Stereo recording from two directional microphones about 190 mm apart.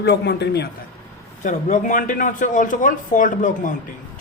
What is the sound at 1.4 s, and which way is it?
Speech, 40° left (ahead or behind).